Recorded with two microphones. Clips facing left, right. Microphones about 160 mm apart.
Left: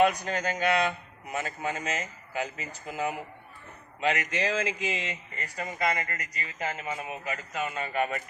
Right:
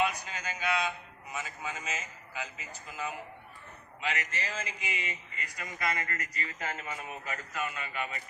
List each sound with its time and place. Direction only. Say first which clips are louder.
0.0 s a man's voice: left 8 dB; 65° left (ahead or behind); by 5.1 s 90° left
5.4 s a man's voice: left 7 dB; 30° left (ahead or behind)
7.7 s a man's voice: left 8 dB; 40° left (ahead or behind)